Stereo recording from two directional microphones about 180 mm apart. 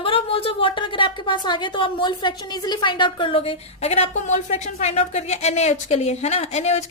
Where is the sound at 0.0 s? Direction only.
30° left (ahead or behind).